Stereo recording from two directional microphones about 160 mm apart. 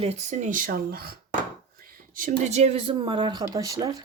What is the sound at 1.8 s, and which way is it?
Speech, 65° right (ahead or behind).